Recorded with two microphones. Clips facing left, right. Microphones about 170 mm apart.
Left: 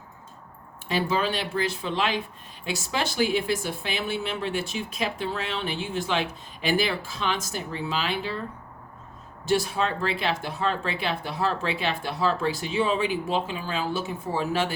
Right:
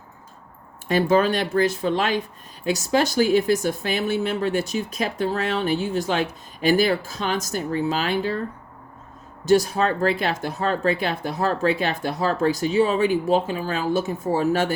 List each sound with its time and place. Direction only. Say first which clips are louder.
0.9 s speech: right 7 dB; 50° right (ahead or behind)
9.5 s speech: right 6 dB; 45° right (ahead or behind)